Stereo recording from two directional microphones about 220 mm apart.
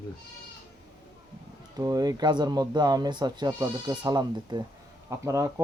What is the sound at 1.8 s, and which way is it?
A man's voice, 15° right (ahead or behind).